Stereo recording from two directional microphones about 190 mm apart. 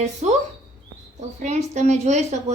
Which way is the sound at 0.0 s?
35° right (ahead or behind).